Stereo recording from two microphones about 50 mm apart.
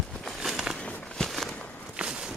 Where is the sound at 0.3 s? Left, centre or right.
Centre.